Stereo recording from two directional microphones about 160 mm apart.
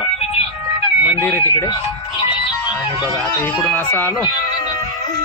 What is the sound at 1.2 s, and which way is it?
Speech, 10° left (ahead or behind).